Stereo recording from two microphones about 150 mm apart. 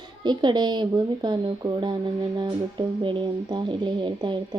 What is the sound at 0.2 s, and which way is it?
Speech, 30° right (ahead or behind).